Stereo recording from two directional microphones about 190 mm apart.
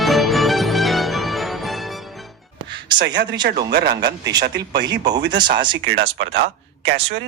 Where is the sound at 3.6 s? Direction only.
60° right (ahead or behind).